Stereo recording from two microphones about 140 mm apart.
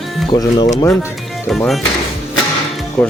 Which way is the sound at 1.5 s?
Centre (ahead or behind).